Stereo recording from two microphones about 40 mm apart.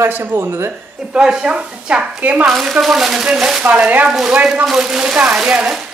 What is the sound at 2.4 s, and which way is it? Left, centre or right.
Speech, centre.